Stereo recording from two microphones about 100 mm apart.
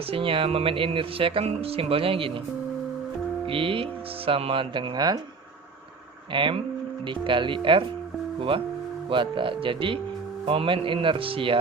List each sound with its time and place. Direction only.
0.1 s speech: 65° right (ahead or behind)
3.4 s music: 65° right (ahead or behind)
4.3 s a man's voice: 75° right (ahead or behind); by 5.2 s 45° right (ahead or behind)
6.3 s a man's voice: 55° right (ahead or behind)
10.4 s a man's voice: 70° right (ahead or behind)